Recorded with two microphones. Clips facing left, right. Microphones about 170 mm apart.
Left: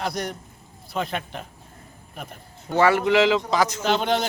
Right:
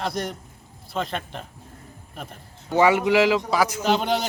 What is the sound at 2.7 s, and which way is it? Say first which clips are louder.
A man's voice: even; 15° right (ahead or behind).